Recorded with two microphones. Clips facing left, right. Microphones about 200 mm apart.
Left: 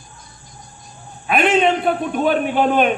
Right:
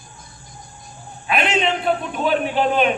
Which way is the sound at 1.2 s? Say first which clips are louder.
Left 5 dB; 50° left (ahead or behind).